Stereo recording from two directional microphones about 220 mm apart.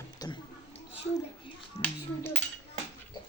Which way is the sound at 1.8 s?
10° left (ahead or behind).